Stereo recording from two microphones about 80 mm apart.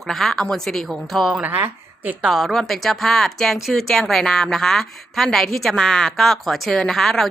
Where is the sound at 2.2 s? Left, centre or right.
Centre.